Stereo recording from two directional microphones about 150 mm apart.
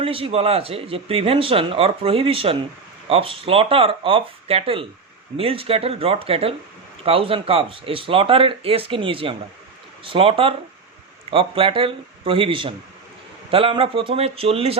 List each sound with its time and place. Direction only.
0.0 s speech: 40° right (ahead or behind)